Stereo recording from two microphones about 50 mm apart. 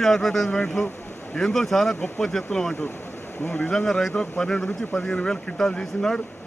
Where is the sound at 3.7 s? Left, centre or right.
Centre.